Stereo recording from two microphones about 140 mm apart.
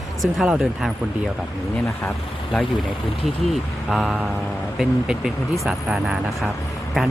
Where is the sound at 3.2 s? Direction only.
Centre (ahead or behind).